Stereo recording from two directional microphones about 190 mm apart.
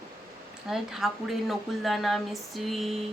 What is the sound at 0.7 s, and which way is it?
Speech, centre (ahead or behind).